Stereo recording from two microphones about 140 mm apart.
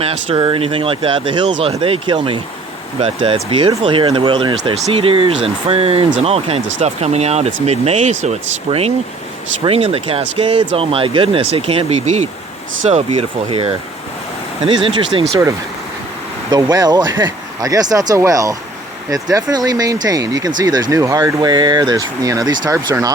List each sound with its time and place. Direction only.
0.0 s speech: 40° right (ahead or behind)
13.1 s speech: 40° right (ahead or behind)
16.5 s speech: 25° right (ahead or behind)